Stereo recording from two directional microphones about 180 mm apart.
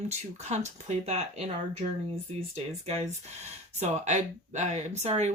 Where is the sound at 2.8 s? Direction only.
35° right (ahead or behind).